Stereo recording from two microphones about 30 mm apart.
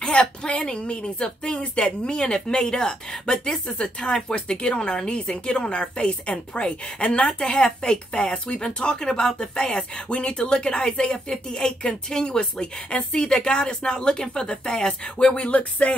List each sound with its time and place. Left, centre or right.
0.0 s a woman's voice: left
3.6 s a woman's voice: left
4.0 s a woman's voice: left
7.4 s a woman's voice: left
15.3 s music: left